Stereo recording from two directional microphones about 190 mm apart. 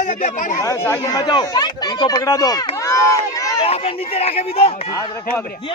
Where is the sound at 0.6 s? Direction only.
15° left (ahead or behind).